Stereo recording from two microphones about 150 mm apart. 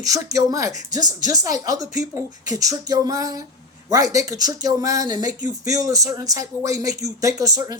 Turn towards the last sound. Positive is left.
turn(degrees=-25)  # may be behind; listen again after turning